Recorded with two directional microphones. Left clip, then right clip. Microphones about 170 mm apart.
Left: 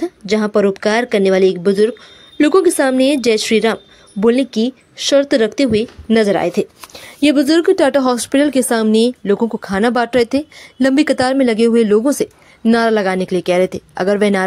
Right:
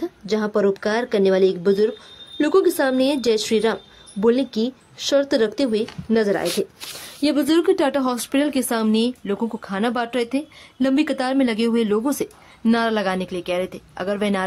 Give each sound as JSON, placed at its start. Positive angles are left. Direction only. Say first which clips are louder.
{"t": 0.0, "sound": "speech", "louder": "left 6 dB", "side_deg": 25}